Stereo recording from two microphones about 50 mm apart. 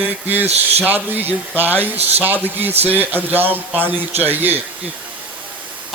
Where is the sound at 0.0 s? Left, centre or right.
Right.